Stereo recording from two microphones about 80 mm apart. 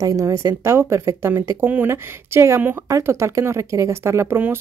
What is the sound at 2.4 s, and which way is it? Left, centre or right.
Speech, right.